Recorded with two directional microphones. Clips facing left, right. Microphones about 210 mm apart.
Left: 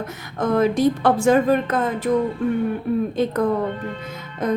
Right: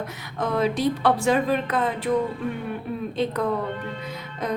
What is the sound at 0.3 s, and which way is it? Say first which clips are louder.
A woman's voice: left 5 dB; 50° left (ahead or behind).